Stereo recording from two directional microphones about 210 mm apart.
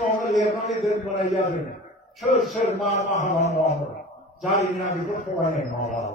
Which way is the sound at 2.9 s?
35° left (ahead or behind).